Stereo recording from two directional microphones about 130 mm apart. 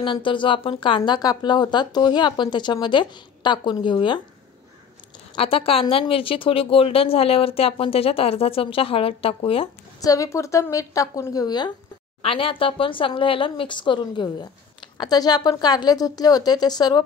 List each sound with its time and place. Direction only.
0.0 s speech: 40° left (ahead or behind)
5.3 s speech: 45° left (ahead or behind)
9.9 s a woman's voice: 25° left (ahead or behind)
12.2 s speech: 45° left (ahead or behind)